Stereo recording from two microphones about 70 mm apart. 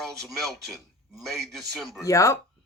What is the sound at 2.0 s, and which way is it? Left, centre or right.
Speech, left.